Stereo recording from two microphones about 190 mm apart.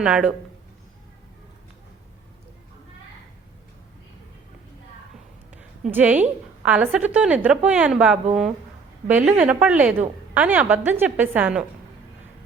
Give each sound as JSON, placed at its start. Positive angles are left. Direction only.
{"t": 0.0, "sound": "speech", "side_deg": -5}
{"t": 5.9, "sound": "a woman's voice", "side_deg": -10}